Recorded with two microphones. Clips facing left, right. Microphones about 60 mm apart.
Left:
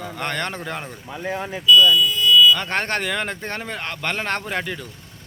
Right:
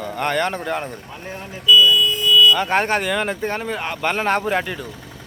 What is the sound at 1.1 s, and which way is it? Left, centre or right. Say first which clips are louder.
Speech: left 5 dB; left.